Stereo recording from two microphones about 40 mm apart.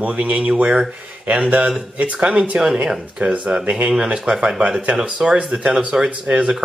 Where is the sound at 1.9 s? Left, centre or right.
Right.